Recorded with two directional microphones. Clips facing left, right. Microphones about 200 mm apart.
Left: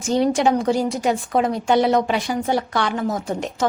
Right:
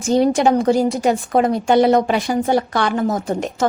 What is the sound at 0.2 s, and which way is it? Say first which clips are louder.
A woman's voice: right 2 dB; 45° right (ahead or behind).